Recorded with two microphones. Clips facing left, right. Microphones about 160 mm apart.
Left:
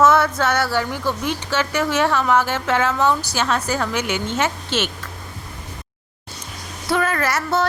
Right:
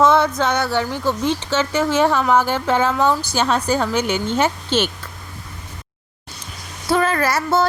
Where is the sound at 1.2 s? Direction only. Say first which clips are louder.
Right 3 dB; 30° right (ahead or behind).